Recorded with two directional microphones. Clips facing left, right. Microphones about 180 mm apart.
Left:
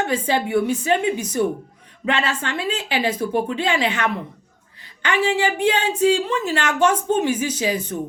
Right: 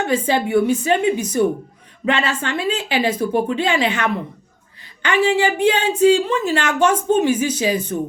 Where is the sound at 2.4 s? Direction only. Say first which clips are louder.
Right 3 dB; 20° right (ahead or behind).